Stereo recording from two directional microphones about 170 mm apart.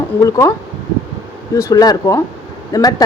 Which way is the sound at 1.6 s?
20° left (ahead or behind).